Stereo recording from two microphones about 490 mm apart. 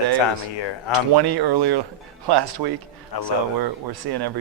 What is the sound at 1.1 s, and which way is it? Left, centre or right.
Speech, right.